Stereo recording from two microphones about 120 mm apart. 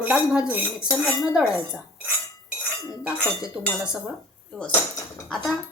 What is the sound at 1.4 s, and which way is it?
Speech, 10° right (ahead or behind).